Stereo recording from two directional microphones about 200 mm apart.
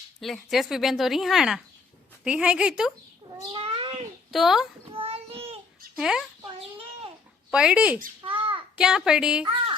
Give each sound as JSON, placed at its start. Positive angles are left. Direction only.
{"t": 0.2, "sound": "a woman's voice", "side_deg": 0}
{"t": 3.3, "sound": "cat", "side_deg": -25}
{"t": 4.3, "sound": "a woman's voice", "side_deg": 0}
{"t": 4.9, "sound": "child singing", "side_deg": -30}
{"t": 6.0, "sound": "a woman's voice", "side_deg": -5}
{"t": 7.5, "sound": "a woman's voice", "side_deg": -5}
{"t": 8.2, "sound": "a sound", "side_deg": -25}
{"t": 8.7, "sound": "a woman's voice", "side_deg": -5}